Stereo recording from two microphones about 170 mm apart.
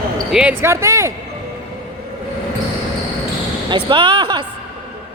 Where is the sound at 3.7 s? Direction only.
30° right (ahead or behind).